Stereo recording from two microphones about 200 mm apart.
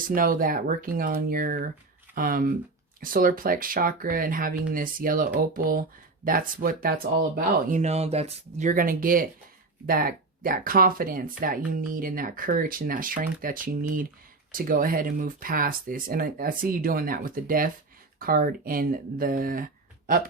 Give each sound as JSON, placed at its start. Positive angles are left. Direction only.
{"t": 0.0, "sound": "speech", "side_deg": -45}